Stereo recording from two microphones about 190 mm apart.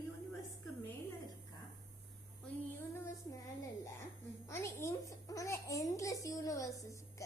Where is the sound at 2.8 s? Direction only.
15° left (ahead or behind).